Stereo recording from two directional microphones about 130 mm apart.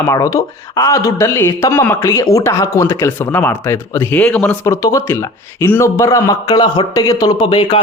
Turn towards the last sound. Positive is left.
turn(degrees=40)  # may be behind; listen again after turning